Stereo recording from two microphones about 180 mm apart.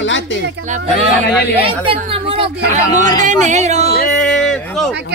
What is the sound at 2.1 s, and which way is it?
Speech, 30° right (ahead or behind).